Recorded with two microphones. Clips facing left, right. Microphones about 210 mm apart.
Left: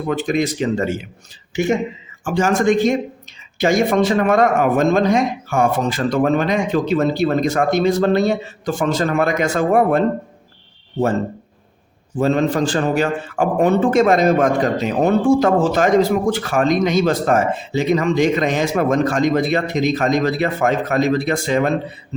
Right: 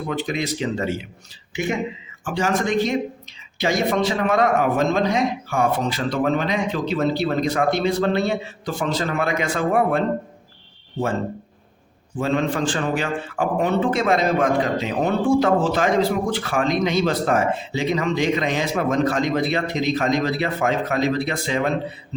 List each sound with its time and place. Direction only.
0.1 s a man's voice: 50° left (ahead or behind)
12.1 s a man's voice: 40° left (ahead or behind)